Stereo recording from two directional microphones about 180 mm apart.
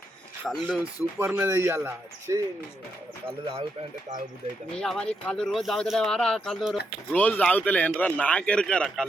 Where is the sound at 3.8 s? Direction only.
35° right (ahead or behind).